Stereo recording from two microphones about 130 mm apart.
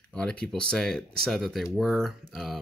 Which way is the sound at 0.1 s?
10° left (ahead or behind).